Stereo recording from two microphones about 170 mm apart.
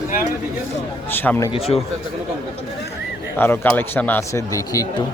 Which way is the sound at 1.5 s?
35° left (ahead or behind).